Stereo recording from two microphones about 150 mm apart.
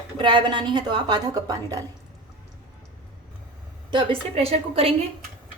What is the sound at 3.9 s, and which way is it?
A woman's voice, 35° right (ahead or behind).